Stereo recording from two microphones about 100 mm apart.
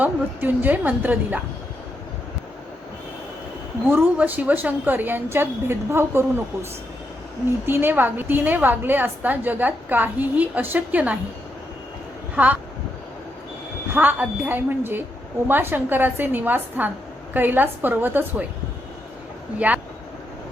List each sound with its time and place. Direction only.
0.0 s a woman's voice: 20° right (ahead or behind)
3.8 s a woman's voice: 20° right (ahead or behind)
7.7 s a woman's voice: 20° right (ahead or behind)
12.4 s a woman's voice: 15° right (ahead or behind)
13.9 s a woman's voice: 20° right (ahead or behind)
19.5 s speech: 15° right (ahead or behind)